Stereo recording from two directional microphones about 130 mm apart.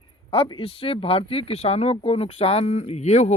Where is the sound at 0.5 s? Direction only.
45° left (ahead or behind).